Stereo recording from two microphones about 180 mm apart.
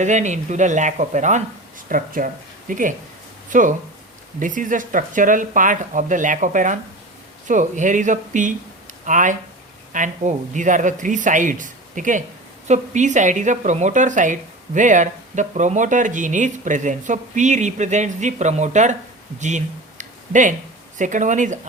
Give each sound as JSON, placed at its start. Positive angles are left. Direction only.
{"t": 0.0, "sound": "speech", "side_deg": -40}
{"t": 19.4, "sound": "a sound", "side_deg": -40}
{"t": 21.0, "sound": "speech", "side_deg": -45}